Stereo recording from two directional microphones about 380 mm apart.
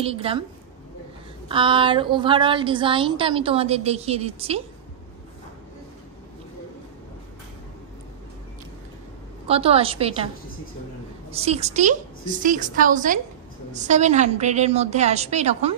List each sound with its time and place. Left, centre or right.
0.0 s a woman's voice: centre
1.5 s a woman's voice: centre
9.5 s a woman's voice: centre
11.3 s a woman's voice: centre